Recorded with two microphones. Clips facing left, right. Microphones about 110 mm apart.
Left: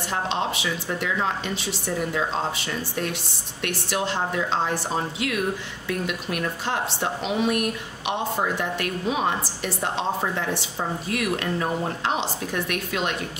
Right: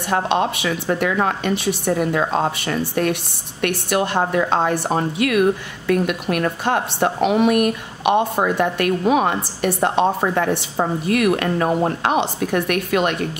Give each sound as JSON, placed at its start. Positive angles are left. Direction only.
{"t": 0.1, "sound": "a woman's voice", "side_deg": -60}